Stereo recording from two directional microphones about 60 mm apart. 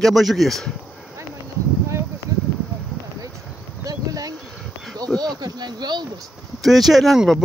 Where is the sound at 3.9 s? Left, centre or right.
Right.